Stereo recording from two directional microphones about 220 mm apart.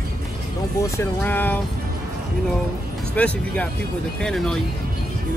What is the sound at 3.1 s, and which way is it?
Speech, 5° left (ahead or behind).